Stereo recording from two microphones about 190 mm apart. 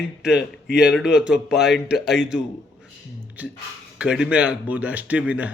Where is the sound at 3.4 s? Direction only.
10° right (ahead or behind).